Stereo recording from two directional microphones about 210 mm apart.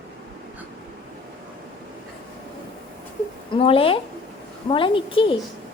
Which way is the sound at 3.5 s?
25° left (ahead or behind).